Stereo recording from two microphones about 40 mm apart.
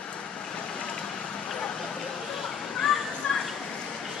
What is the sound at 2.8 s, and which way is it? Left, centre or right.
Children playing, centre.